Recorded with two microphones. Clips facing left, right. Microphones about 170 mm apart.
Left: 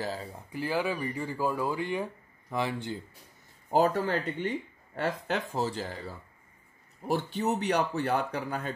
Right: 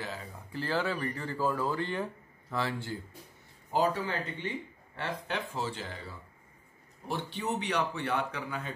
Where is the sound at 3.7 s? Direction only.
45° left (ahead or behind).